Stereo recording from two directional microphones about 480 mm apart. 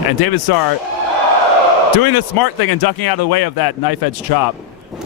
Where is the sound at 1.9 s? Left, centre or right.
Left.